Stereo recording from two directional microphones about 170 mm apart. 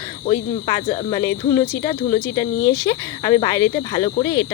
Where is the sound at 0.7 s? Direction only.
30° left (ahead or behind).